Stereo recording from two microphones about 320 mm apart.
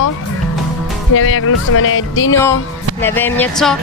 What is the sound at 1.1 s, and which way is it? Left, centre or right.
Speech, left.